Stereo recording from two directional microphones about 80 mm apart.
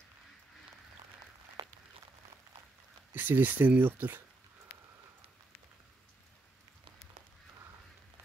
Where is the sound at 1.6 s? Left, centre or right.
Right.